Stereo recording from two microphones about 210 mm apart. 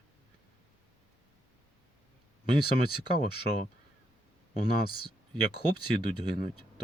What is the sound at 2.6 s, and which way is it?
Speech, 45° left (ahead or behind).